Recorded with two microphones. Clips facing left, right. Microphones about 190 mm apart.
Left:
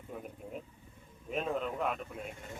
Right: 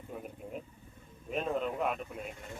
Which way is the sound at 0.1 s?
Centre (ahead or behind).